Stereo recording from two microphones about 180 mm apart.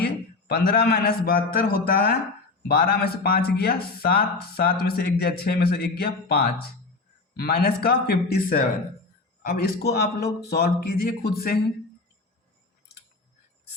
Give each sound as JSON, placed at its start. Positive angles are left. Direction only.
{"t": 0.0, "sound": "a man's voice", "side_deg": 60}